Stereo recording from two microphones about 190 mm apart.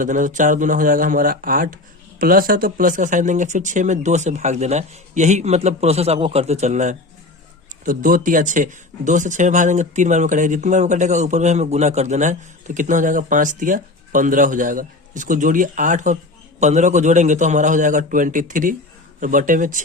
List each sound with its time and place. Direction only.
0.0 s speech: 45° right (ahead or behind)